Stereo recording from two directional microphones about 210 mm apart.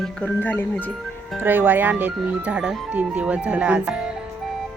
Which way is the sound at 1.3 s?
10° right (ahead or behind).